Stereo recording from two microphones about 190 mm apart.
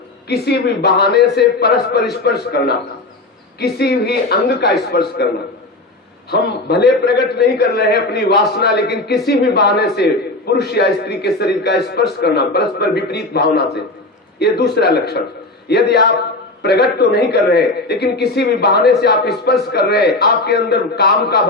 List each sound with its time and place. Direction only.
0.3 s a man's voice: 60° left (ahead or behind)
6.3 s a man's voice: 60° left (ahead or behind)